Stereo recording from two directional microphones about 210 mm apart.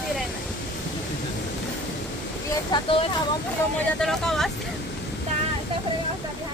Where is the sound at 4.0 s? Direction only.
Centre (ahead or behind).